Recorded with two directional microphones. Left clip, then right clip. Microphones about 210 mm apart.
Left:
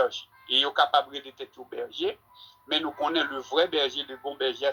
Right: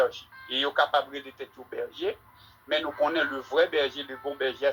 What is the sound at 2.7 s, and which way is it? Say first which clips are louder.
Speech: right 1 dB; 35° left (ahead or behind).